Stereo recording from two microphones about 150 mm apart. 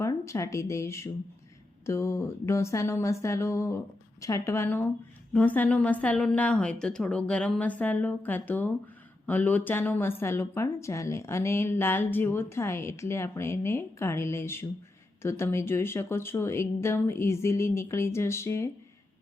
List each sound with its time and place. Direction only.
0.0 s a woman's voice: 20° left (ahead or behind)